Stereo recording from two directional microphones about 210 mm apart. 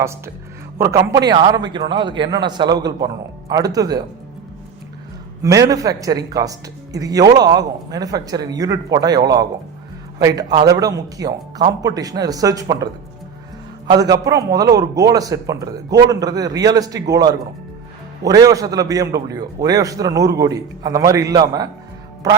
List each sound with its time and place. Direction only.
0.8 s a man's voice: 15° right (ahead or behind)
5.4 s speech: 15° right (ahead or behind)